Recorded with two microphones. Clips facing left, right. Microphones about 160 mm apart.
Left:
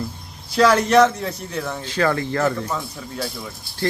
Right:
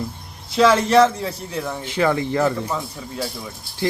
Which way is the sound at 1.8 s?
15° right (ahead or behind).